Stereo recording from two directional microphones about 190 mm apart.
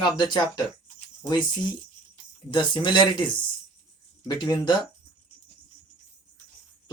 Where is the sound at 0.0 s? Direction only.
25° left (ahead or behind).